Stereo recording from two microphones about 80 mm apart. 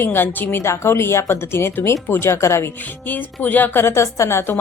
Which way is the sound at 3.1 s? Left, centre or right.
Left.